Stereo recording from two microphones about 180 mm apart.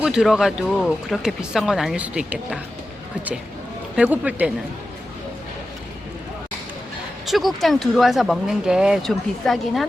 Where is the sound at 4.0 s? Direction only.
10° right (ahead or behind).